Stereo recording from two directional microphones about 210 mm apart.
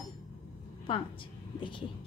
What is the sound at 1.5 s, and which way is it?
Speech, 25° left (ahead or behind).